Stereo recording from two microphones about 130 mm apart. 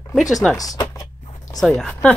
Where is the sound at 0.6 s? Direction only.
30° left (ahead or behind).